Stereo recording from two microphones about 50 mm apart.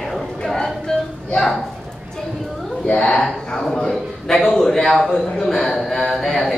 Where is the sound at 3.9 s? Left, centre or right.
Centre.